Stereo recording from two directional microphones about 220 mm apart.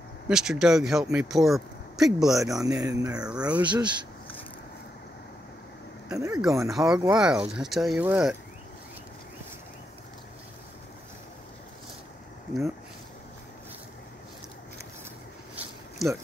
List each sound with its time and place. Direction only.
0.3 s speech: 5° right (ahead or behind)
2.6 s speech: 15° right (ahead or behind)
3.2 s speech: 5° right (ahead or behind)
3.6 s speech: 20° right (ahead or behind)
6.1 s speech: 15° right (ahead or behind)
6.7 s speech: centre (ahead or behind)
15.5 s a sound: centre (ahead or behind)